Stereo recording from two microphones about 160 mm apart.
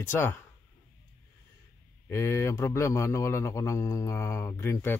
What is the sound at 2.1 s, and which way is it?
Speech, 20° left (ahead or behind).